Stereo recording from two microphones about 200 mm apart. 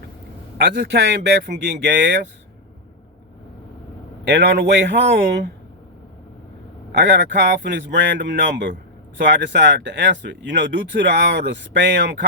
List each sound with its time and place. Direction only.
0.8 s speech: 55° right (ahead or behind)
4.3 s speech: 55° right (ahead or behind)
6.9 s speech: 60° right (ahead or behind)